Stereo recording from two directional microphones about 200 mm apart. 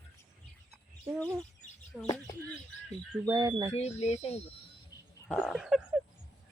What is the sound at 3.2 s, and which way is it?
Speech, 20° right (ahead or behind).